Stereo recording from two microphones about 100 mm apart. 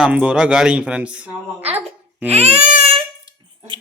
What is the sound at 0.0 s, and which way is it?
A man's voice, 10° right (ahead or behind).